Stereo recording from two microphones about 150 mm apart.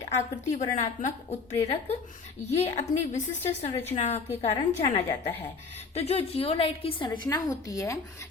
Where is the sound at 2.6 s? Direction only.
50° left (ahead or behind).